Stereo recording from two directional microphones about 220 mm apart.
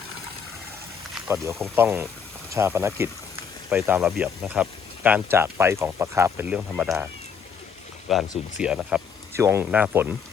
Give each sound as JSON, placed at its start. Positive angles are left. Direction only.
{"t": 1.1, "sound": "speech", "side_deg": -10}
{"t": 8.1, "sound": "speech", "side_deg": 0}